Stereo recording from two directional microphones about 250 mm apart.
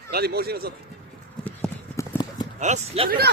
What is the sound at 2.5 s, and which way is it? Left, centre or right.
Speech, right.